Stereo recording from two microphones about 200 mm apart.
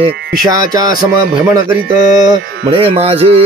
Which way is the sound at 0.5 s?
20° right (ahead or behind).